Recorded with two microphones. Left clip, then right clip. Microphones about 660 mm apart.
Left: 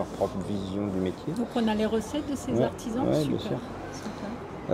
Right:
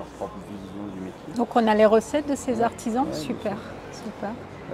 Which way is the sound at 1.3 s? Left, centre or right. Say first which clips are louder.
Right 11 dB; right.